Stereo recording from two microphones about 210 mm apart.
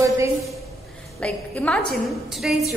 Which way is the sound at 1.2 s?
5° left (ahead or behind).